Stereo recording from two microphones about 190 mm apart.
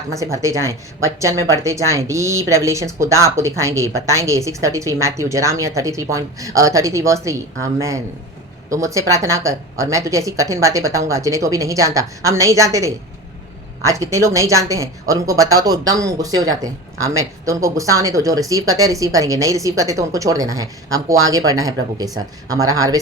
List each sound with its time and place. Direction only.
0.2 s speech: 15° right (ahead or behind)